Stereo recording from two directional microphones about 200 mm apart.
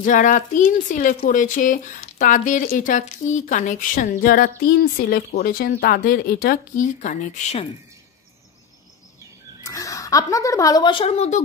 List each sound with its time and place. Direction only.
0.0 s speech: 40° left (ahead or behind)
9.7 s a woman's voice: 15° left (ahead or behind); by 11.4 s 35° left (ahead or behind)